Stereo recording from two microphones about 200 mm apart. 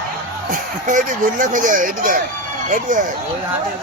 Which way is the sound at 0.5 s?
40° right (ahead or behind).